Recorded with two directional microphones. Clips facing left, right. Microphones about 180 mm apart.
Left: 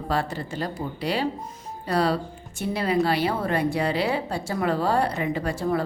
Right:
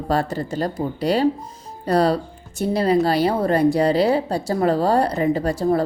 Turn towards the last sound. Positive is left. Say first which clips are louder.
# right 6 dB
turn(degrees=-35)  # may be behind; listen again after turning